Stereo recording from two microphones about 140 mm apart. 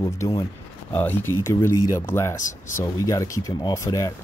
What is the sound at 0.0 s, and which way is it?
Speech, 25° left (ahead or behind).